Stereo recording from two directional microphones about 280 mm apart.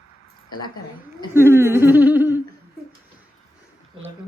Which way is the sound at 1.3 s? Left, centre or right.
Centre.